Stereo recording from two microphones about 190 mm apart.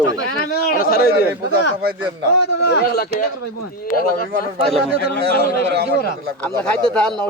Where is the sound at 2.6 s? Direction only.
60° left (ahead or behind).